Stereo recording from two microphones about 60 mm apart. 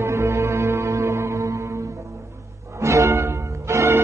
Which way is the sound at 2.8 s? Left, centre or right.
Right.